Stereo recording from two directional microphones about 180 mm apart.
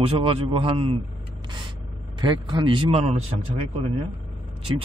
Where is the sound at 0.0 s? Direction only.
30° right (ahead or behind).